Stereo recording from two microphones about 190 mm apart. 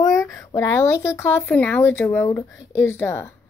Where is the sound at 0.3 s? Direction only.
15° left (ahead or behind).